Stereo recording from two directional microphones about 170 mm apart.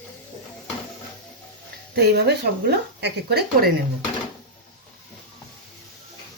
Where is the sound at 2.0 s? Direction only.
75° right (ahead or behind).